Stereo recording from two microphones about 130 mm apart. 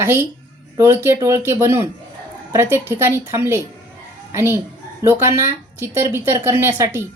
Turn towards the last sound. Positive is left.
turn(degrees=-25)  # may be behind; listen again after turning